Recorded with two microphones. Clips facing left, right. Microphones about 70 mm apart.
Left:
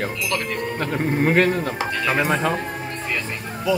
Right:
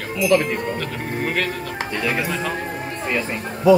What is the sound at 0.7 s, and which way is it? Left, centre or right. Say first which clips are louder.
Speech: left 4 dB; left.